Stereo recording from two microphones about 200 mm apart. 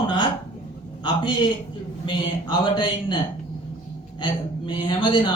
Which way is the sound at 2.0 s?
25° left (ahead or behind).